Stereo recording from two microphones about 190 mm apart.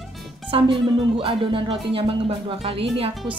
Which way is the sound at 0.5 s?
30° right (ahead or behind).